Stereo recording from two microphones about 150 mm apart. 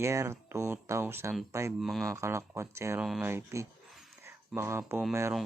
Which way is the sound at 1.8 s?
Centre (ahead or behind).